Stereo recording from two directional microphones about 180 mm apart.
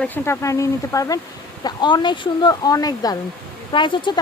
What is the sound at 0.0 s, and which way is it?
Speech, 10° left (ahead or behind).